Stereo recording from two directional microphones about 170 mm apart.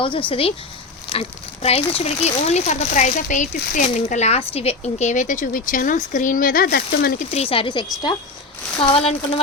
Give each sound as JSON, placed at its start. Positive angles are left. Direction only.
{"t": 0.0, "sound": "speech", "side_deg": 30}
{"t": 7.3, "sound": "speech", "side_deg": 35}